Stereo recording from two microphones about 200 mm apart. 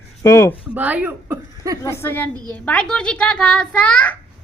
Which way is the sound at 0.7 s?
10° right (ahead or behind).